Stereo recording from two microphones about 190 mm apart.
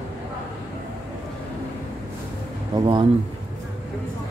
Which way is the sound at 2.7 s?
25° right (ahead or behind).